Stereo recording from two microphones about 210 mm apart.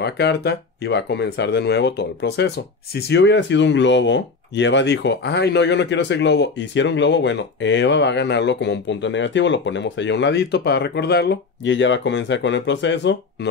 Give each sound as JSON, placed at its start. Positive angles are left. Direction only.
{"t": 0.0, "sound": "speech", "side_deg": 50}